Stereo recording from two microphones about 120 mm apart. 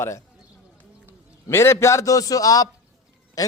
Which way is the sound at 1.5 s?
20° left (ahead or behind).